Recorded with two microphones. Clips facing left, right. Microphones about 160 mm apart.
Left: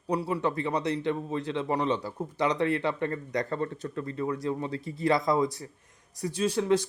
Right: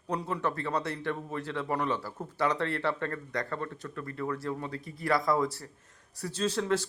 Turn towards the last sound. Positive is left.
turn(degrees=15)  # may be behind; listen again after turning